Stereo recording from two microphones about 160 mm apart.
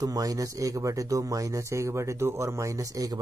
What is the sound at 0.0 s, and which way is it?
Speech, 20° right (ahead or behind).